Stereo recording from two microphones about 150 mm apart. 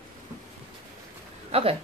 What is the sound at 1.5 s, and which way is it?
Speech, 40° right (ahead or behind).